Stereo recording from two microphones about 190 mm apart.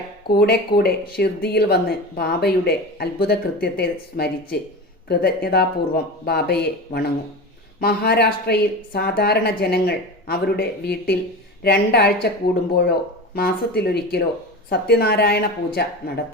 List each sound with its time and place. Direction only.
0.3 s speech: 55° left (ahead or behind)
13.3 s speech: 55° left (ahead or behind)